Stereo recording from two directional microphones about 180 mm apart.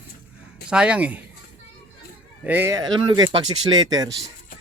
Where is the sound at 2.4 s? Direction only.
10° right (ahead or behind).